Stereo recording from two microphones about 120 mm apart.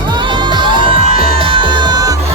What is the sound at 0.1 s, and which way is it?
Music, 40° right (ahead or behind).